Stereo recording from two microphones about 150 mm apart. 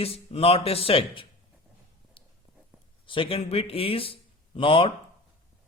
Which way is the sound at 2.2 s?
35° left (ahead or behind).